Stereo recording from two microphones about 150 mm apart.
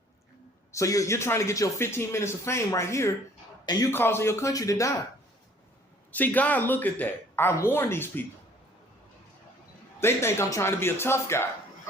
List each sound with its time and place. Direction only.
0.7 s speech: 20° left (ahead or behind)
6.1 s speech: 10° left (ahead or behind)
10.0 s speech: 15° left (ahead or behind)